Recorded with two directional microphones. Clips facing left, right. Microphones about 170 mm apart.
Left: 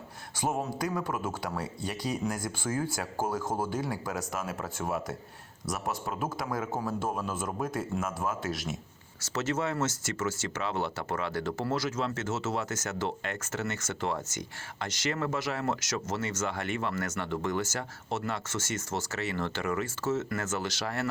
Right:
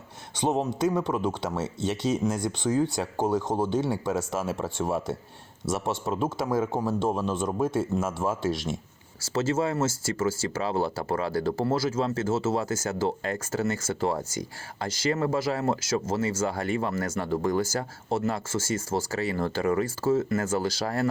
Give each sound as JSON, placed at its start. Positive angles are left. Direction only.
{"t": 0.3, "sound": "speech", "side_deg": -20}
{"t": 3.2, "sound": "speech", "side_deg": 5}
{"t": 3.7, "sound": "speech", "side_deg": -25}